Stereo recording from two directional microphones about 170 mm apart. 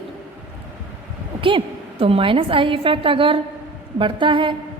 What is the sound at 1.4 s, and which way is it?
A woman's voice, 30° right (ahead or behind).